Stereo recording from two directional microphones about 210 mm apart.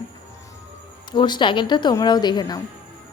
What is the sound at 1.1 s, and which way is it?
A woman's voice, 20° left (ahead or behind).